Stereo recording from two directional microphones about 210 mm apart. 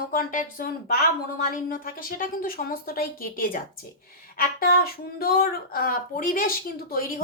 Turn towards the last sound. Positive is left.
turn(degrees=45)  # may be behind; listen again after turning